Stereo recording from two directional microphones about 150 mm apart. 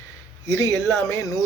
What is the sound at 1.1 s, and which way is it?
Speech, 20° left (ahead or behind).